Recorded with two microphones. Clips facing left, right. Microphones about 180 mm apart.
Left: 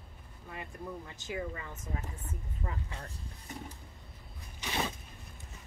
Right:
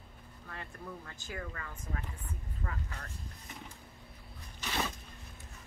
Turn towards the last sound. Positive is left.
turn(degrees=15)  # may be behind; listen again after turning